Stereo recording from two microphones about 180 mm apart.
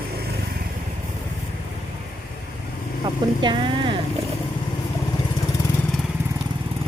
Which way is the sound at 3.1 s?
25° right (ahead or behind).